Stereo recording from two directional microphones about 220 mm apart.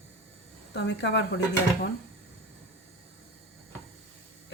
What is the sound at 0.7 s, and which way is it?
Speech, 55° left (ahead or behind).